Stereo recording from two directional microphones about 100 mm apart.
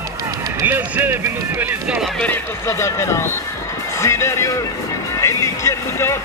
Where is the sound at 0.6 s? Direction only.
20° right (ahead or behind).